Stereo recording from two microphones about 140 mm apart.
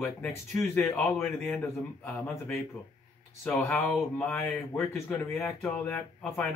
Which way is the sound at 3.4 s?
10° left (ahead or behind).